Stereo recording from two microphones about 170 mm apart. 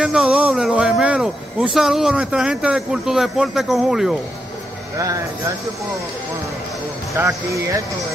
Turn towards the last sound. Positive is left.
turn(degrees=-20)  # may be behind; listen again after turning